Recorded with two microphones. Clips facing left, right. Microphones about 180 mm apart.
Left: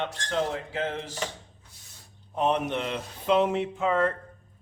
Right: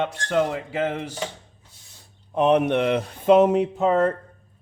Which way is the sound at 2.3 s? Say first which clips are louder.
Right 8 dB; 65° right (ahead or behind).